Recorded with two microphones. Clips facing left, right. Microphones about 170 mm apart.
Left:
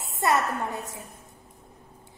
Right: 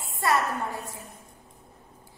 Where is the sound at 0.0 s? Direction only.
20° left (ahead or behind).